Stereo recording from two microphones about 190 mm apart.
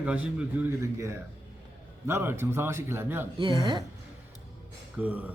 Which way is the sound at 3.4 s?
25° right (ahead or behind).